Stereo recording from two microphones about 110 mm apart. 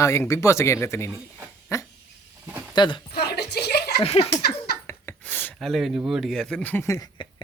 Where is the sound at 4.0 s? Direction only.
65° left (ahead or behind).